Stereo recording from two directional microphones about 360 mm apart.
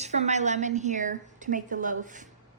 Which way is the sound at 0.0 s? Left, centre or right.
Centre.